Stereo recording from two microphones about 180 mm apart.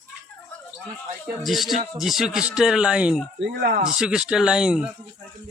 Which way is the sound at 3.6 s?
55° right (ahead or behind).